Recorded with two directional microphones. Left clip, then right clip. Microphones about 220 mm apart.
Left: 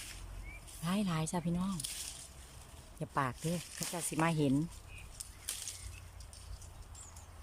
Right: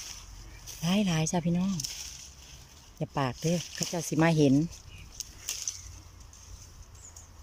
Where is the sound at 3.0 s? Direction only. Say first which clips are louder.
Right 5 dB; 10° right (ahead or behind).